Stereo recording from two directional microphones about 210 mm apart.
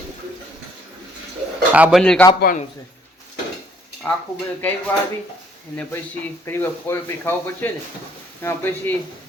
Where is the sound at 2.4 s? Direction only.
40° left (ahead or behind).